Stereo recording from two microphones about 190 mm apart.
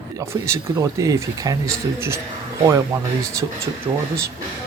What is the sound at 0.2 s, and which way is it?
Speech, 15° right (ahead or behind).